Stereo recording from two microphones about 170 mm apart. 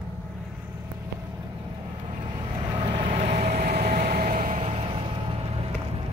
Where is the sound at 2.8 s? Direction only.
35° right (ahead or behind); by 4.7 s 50° right (ahead or behind).